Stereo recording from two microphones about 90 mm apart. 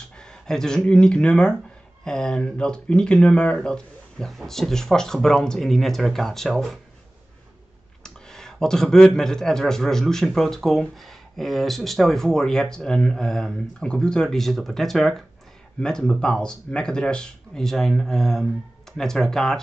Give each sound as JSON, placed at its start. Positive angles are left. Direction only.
{"t": 0.2, "sound": "speech", "side_deg": 5}
{"t": 8.0, "sound": "speech", "side_deg": 5}